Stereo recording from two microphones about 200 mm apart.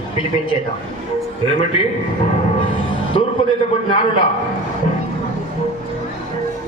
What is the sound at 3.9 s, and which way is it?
Speech, 25° left (ahead or behind).